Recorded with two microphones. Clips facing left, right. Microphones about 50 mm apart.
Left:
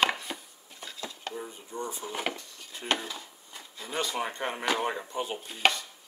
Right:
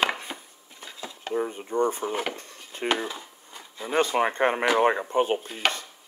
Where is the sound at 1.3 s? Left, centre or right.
Right.